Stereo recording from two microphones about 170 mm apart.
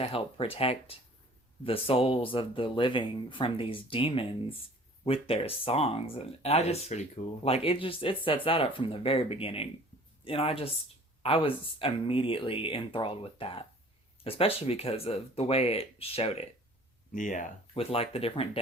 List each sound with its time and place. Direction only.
0.0 s speech: 35° left (ahead or behind)
17.1 s speech: 50° left (ahead or behind)
17.7 s speech: 35° left (ahead or behind)